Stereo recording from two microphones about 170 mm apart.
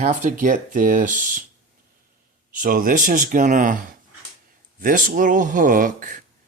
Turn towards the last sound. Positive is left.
turn(degrees=-50)  # may be behind; listen again after turning